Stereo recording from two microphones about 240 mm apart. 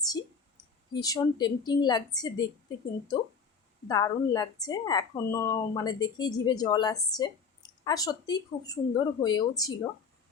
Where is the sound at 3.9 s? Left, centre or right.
Centre.